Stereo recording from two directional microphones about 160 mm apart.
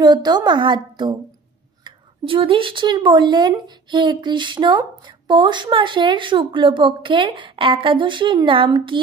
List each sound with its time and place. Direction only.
0.0 s a woman's voice: 25° right (ahead or behind)